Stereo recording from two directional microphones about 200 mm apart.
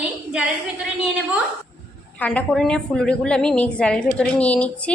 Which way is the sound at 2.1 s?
5° left (ahead or behind).